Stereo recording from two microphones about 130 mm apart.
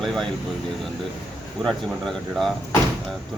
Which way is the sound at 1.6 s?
5° left (ahead or behind).